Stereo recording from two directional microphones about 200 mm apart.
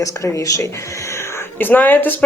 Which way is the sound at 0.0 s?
15° left (ahead or behind).